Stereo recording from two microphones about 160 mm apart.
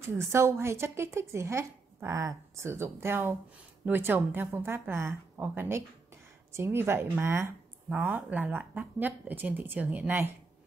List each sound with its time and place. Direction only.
0.0 s speech: 15° right (ahead or behind)